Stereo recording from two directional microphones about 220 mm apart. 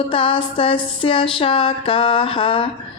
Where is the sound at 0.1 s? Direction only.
25° left (ahead or behind).